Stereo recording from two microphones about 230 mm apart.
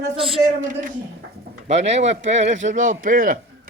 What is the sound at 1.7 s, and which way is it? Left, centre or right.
Speech, right.